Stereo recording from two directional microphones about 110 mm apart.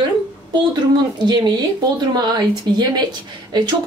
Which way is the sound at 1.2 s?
40° right (ahead or behind).